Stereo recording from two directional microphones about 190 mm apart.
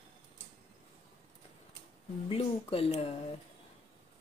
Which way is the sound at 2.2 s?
30° left (ahead or behind).